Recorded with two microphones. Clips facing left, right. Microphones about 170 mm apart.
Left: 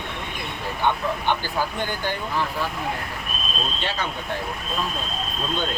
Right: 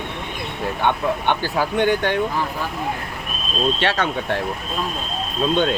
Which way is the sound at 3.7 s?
80° right.